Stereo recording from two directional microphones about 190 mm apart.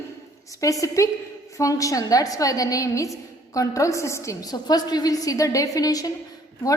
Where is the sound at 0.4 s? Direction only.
15° left (ahead or behind).